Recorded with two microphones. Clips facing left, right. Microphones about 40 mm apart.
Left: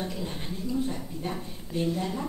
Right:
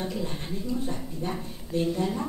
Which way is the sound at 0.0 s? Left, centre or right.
Centre.